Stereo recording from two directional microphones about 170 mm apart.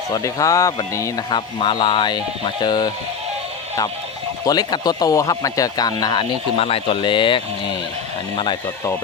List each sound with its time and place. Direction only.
0.1 s speech: 20° left (ahead or behind)
4.4 s speech: 25° left (ahead or behind)